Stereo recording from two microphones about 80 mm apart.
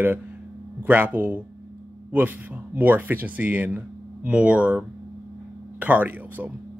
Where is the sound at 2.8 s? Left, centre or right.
Right.